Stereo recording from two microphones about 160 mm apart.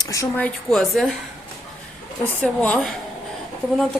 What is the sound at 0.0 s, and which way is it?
Speech, 20° left (ahead or behind).